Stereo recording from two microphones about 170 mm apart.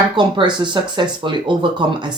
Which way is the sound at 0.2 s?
25° right (ahead or behind).